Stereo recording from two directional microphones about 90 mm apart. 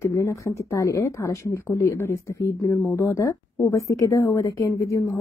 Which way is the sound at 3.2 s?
35° left (ahead or behind).